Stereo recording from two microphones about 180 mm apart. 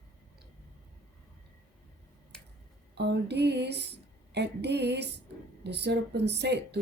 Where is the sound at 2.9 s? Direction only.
70° right (ahead or behind).